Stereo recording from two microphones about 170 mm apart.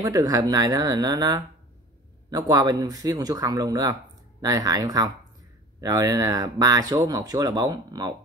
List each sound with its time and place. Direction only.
0.0 s speech: 20° right (ahead or behind)